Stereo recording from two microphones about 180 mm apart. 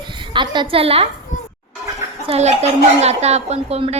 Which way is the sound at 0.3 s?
25° right (ahead or behind).